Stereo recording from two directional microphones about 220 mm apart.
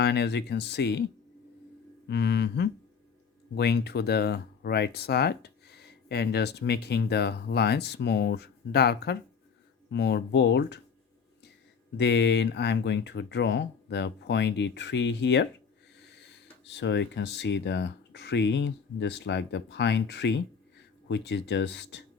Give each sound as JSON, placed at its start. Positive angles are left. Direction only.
{"t": 0.0, "sound": "speech", "side_deg": 50}
{"t": 2.0, "sound": "speech", "side_deg": 50}
{"t": 11.9, "sound": "speech", "side_deg": 50}